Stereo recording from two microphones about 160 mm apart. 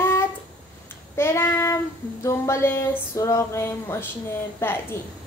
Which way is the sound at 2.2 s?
15° left (ahead or behind).